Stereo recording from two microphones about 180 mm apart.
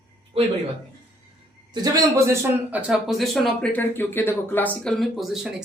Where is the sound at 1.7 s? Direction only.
20° right (ahead or behind).